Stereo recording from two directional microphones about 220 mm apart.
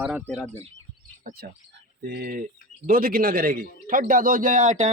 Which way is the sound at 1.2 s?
35° right (ahead or behind).